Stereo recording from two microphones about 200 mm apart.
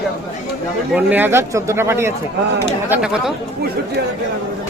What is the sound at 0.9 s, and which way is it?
A man's voice, 10° right (ahead or behind).